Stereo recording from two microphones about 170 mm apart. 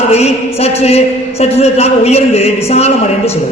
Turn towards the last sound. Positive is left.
turn(degrees=40)  # may be behind; listen again after turning